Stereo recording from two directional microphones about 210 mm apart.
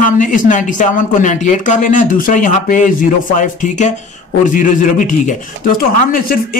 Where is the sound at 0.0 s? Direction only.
35° left (ahead or behind).